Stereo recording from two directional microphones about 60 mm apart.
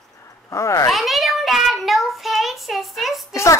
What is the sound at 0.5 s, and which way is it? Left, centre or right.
Speech, left.